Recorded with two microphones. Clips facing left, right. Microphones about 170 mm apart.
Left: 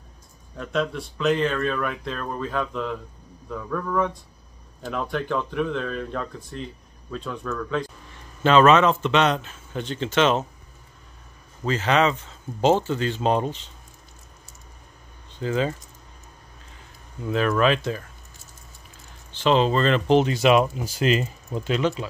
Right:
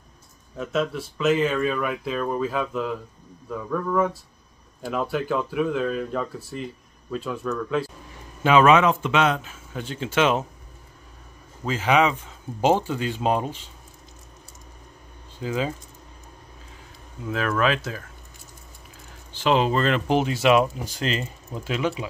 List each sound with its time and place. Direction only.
0.6 s speech: 5° right (ahead or behind)
11.6 s speech: 10° right (ahead or behind)
15.3 s speech: 5° right (ahead or behind)
17.3 s speech: centre (ahead or behind)
19.3 s speech: 10° right (ahead or behind)
21.5 s speech: 5° right (ahead or behind)